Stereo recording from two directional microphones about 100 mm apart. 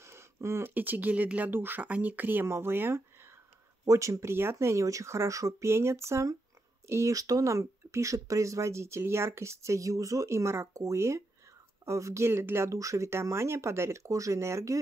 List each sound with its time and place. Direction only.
0.0 s speech: 25° right (ahead or behind)